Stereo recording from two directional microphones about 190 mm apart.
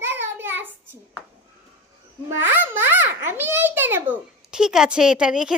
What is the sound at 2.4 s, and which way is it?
A child's voice, 10° right (ahead or behind).